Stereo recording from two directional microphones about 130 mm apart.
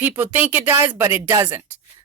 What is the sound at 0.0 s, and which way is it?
Speech, 15° right (ahead or behind).